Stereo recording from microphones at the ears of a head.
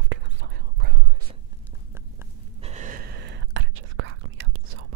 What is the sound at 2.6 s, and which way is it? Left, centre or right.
Whispering, right.